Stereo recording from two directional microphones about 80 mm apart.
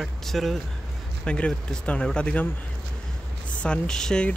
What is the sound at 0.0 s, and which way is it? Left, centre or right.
Speech, centre.